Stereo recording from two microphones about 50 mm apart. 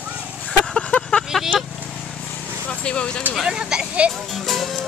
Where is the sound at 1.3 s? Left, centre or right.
Centre.